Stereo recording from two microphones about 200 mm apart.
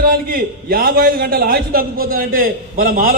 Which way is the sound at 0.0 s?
45° right (ahead or behind).